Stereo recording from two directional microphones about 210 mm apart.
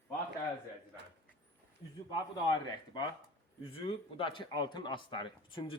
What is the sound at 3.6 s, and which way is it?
Speech, 25° left (ahead or behind).